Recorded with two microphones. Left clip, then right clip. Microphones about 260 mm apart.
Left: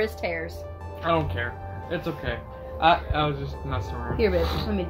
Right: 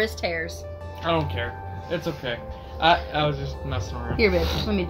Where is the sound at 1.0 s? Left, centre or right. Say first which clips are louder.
Even; centre.